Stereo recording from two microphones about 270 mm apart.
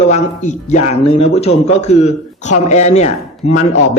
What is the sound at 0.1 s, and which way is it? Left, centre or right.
Speech, left.